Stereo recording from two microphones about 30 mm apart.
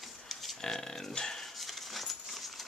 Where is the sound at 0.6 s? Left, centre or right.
Centre.